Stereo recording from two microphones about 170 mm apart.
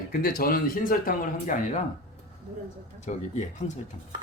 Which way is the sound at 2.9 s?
45° left (ahead or behind).